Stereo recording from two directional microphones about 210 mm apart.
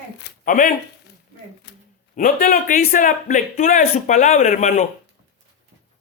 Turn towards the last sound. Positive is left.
turn(degrees=35)  # may be behind; listen again after turning